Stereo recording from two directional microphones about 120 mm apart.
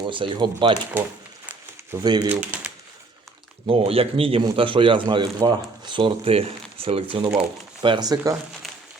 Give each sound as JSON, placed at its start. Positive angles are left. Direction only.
{"t": 0.0, "sound": "speech", "side_deg": -45}
{"t": 2.0, "sound": "speech", "side_deg": -35}
{"t": 2.3, "sound": "speech", "side_deg": -10}
{"t": 3.7, "sound": "speech", "side_deg": -55}
{"t": 7.8, "sound": "speech", "side_deg": -35}